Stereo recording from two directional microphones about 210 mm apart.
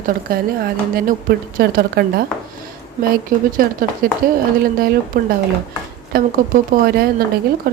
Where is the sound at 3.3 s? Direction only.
40° right (ahead or behind).